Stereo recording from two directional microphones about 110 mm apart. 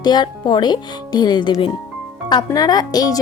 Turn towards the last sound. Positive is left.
turn(degrees=35)  # may be behind; listen again after turning